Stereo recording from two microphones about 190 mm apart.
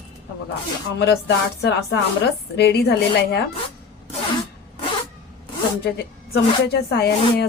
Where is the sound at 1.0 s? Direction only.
65° left (ahead or behind).